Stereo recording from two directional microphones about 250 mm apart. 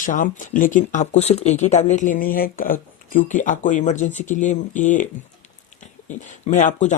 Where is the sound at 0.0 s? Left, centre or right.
Left.